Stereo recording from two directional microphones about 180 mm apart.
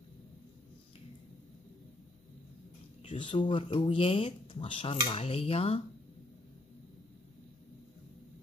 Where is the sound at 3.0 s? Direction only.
30° left (ahead or behind).